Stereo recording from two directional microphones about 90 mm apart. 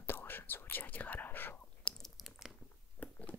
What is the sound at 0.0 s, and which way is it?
Whispering, 25° left (ahead or behind).